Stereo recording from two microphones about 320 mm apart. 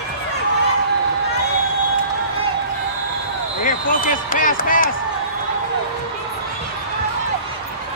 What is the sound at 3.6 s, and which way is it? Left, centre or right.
Speech, left.